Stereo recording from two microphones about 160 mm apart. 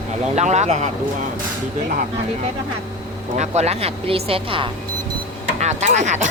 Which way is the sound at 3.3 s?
45° right (ahead or behind).